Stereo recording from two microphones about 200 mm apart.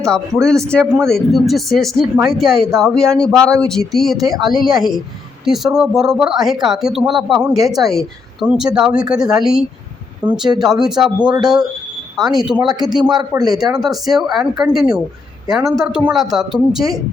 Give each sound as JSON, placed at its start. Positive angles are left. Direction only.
{"t": 0.0, "sound": "speech", "side_deg": 5}
{"t": 11.3, "sound": "a man's voice", "side_deg": -20}
{"t": 12.1, "sound": "speech", "side_deg": 0}
{"t": 13.0, "sound": "a man's voice", "side_deg": -20}
{"t": 13.6, "sound": "a woman's voice", "side_deg": 0}